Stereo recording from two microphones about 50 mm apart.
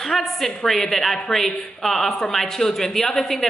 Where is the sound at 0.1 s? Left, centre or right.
Centre.